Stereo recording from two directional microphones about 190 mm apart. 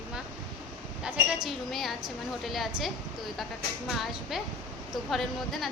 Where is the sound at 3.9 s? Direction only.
Centre (ahead or behind).